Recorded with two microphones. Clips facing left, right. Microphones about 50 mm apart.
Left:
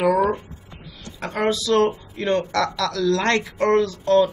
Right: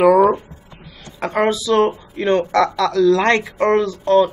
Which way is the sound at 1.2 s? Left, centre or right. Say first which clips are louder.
Right 5 dB; right.